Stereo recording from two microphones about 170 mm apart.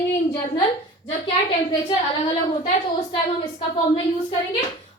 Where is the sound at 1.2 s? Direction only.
30° left (ahead or behind).